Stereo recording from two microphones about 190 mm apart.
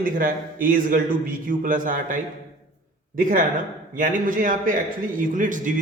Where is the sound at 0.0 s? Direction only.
45° right (ahead or behind).